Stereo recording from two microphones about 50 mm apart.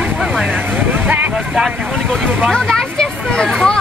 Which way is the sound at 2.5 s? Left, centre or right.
Centre.